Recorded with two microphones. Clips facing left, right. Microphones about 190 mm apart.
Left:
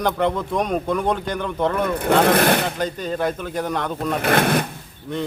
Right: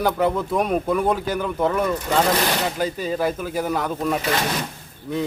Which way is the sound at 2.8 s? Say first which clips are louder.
Right 1 dB; 5° right (ahead or behind).